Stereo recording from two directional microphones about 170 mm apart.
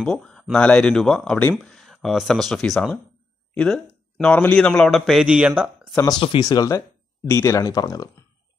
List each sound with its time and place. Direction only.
0.0 s speech: 5° left (ahead or behind)
6.0 s speech: 30° left (ahead or behind)